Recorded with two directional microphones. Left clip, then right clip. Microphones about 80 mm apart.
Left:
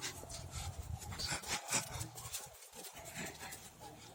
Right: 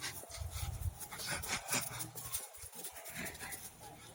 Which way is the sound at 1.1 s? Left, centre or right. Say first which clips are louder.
Even; left.